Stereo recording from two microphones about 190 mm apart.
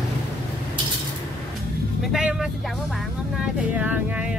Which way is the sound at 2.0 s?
Centre (ahead or behind).